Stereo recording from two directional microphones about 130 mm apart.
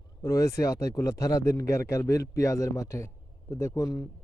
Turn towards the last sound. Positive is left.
turn(degrees=30)  # may be behind; listen again after turning